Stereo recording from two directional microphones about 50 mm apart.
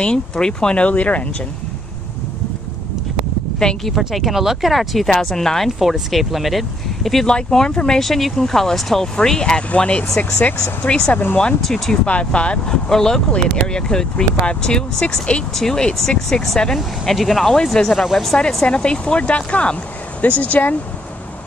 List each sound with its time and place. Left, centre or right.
0.0 s speech: centre
3.6 s speech: centre
4.0 s speech: centre
5.8 s speech: centre; by 11.1 s left
11.6 s speech: centre
12.1 s speech: left
12.9 s speech: centre
18.7 s speech: centre